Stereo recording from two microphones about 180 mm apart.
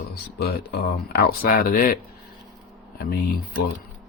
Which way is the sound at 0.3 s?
65° left (ahead or behind).